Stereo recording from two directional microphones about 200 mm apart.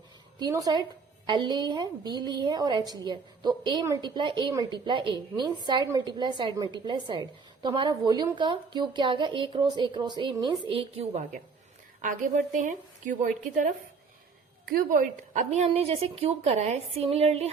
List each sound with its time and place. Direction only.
0.3 s a woman's voice: 20° right (ahead or behind)
12.5 s a woman's voice: 40° right (ahead or behind)